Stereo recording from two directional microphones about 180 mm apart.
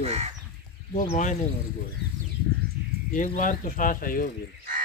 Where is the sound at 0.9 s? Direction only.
45° left (ahead or behind).